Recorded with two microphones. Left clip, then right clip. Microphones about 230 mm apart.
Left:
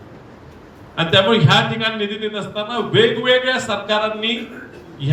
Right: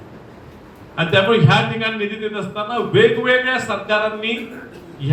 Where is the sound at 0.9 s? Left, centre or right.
Left.